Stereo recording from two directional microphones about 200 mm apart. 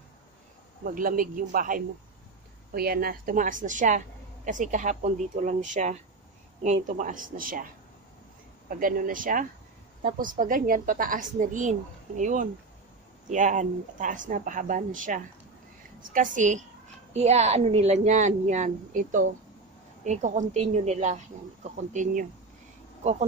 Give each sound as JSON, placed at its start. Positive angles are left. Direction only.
{"t": 0.8, "sound": "a woman's voice", "side_deg": -45}
{"t": 8.6, "sound": "a woman's voice", "side_deg": -45}